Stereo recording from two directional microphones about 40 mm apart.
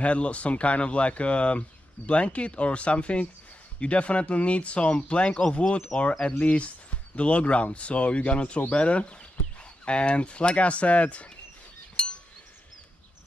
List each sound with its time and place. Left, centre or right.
0.0 s speech: left
12.0 s chink: left